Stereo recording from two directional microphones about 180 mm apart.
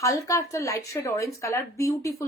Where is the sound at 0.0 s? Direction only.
15° left (ahead or behind).